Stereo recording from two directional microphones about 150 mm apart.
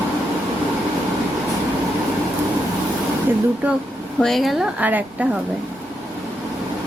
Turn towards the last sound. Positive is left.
turn(degrees=-10)  # may be behind; listen again after turning